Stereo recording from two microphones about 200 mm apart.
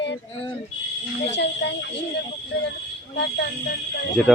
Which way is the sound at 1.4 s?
60° left (ahead or behind).